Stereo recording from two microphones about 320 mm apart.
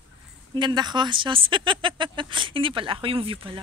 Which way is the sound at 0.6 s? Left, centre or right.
Centre.